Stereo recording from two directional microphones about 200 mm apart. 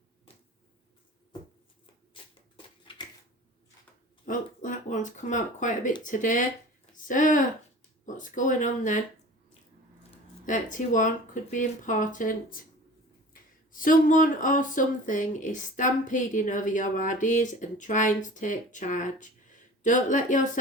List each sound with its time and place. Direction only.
2.2 s shuffling cards: 25° left (ahead or behind)
2.6 s a sound: 25° left (ahead or behind)
4.3 s speech: 40° left (ahead or behind)
10.4 s speech: 40° left (ahead or behind)